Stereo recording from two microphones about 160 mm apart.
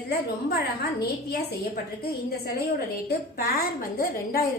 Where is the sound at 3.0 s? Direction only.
70° left (ahead or behind).